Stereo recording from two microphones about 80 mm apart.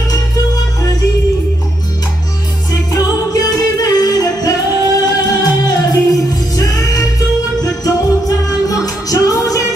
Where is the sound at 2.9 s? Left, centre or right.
Left.